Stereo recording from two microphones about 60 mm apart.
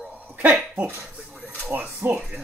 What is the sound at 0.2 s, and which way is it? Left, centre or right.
Dog, right.